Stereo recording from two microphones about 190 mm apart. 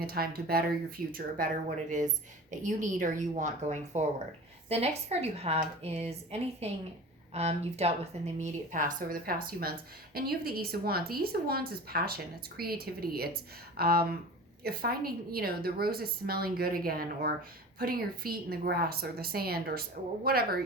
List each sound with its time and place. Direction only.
0.0 s speech: 55° right (ahead or behind)
2.5 s speech: 40° right (ahead or behind)